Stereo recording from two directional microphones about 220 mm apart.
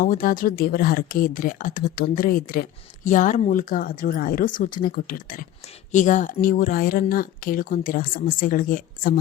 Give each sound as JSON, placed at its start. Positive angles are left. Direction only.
{"t": 0.0, "sound": "speech", "side_deg": 40}